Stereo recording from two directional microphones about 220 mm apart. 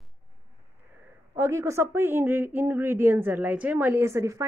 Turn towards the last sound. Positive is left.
turn(degrees=-15)  # may be behind; listen again after turning